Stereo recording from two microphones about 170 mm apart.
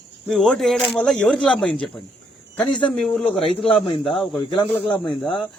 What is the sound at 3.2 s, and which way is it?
Speech, 35° left (ahead or behind).